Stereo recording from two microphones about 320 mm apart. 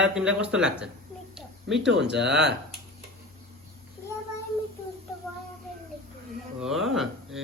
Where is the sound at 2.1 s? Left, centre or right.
Right.